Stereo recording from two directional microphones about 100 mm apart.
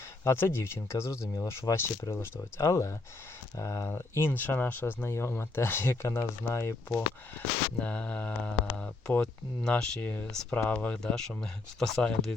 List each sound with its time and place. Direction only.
0.3 s speech: 25° left (ahead or behind); by 12.3 s 5° left (ahead or behind)